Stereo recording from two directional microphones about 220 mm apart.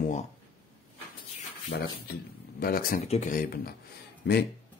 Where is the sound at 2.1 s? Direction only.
45° left (ahead or behind).